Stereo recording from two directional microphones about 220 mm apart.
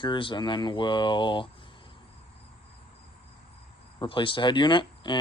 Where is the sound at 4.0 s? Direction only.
20° left (ahead or behind).